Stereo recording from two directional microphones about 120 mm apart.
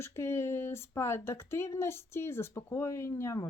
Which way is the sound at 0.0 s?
20° left (ahead or behind).